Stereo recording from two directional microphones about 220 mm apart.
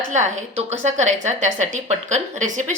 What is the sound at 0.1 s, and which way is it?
A woman's voice, 35° right (ahead or behind).